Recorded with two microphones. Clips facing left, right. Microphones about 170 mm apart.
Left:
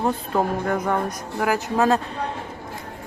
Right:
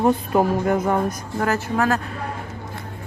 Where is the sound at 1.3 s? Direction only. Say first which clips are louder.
Even; 10° left (ahead or behind).